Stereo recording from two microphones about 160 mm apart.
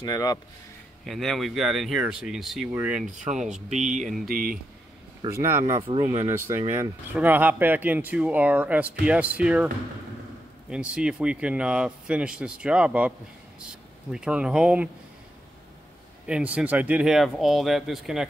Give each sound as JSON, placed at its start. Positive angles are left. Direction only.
{"t": 0.0, "sound": "speech", "side_deg": 25}
{"t": 1.0, "sound": "speech", "side_deg": 0}
{"t": 3.1, "sound": "speech", "side_deg": -50}
{"t": 4.3, "sound": "speech", "side_deg": -65}
{"t": 5.2, "sound": "speech", "side_deg": -30}
{"t": 6.0, "sound": "speech", "side_deg": -15}
{"t": 10.7, "sound": "speech", "side_deg": -5}
{"t": 14.1, "sound": "speech", "side_deg": -5}
{"t": 16.5, "sound": "speech", "side_deg": -10}